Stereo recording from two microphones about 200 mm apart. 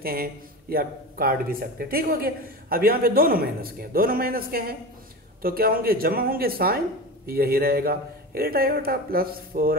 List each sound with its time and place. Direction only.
0.0 s speech: 50° right (ahead or behind)